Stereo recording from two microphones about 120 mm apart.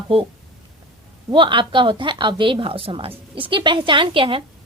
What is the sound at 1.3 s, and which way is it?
A woman's voice, 45° right (ahead or behind).